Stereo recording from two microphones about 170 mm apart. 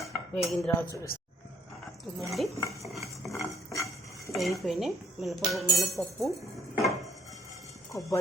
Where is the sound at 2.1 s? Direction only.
Centre (ahead or behind).